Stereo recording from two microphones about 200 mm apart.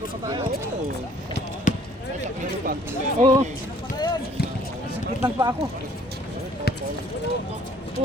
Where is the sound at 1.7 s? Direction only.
40° left (ahead or behind).